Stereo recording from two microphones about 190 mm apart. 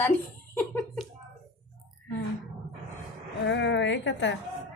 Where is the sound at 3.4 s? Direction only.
70° left (ahead or behind).